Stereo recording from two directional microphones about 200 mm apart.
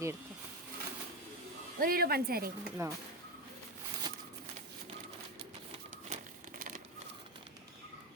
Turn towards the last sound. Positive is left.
turn(degrees=-45)  # may be behind; listen again after turning